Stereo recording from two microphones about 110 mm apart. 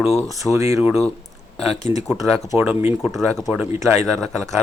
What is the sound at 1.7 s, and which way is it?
Speech, 90° left.